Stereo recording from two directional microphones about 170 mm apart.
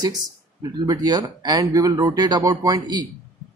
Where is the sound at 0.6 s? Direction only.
25° right (ahead or behind).